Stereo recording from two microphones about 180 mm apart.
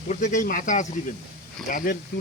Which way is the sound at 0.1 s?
45° left (ahead or behind).